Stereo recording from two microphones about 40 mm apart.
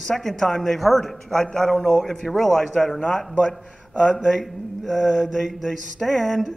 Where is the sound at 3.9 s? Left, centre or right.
Right.